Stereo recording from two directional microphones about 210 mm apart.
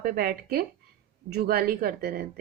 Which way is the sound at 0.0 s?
45° right (ahead or behind).